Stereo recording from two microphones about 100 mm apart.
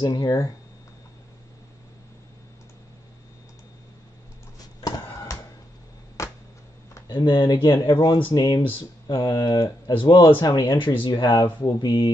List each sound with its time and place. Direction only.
0.0 s speech: 40° left (ahead or behind)
4.6 s a sound: 40° left (ahead or behind)
7.1 s speech: 50° left (ahead or behind)
10.8 s speech: 55° left (ahead or behind)